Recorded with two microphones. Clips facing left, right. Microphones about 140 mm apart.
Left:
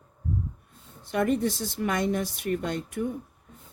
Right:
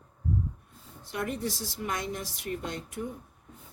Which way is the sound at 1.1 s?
60° left (ahead or behind).